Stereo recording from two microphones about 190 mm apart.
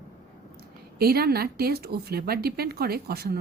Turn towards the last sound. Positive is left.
turn(degrees=-55)  # may be behind; listen again after turning